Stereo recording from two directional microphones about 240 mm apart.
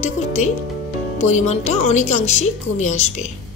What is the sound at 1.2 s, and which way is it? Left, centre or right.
Speech, left.